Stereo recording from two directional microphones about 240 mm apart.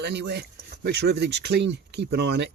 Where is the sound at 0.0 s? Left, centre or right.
Right.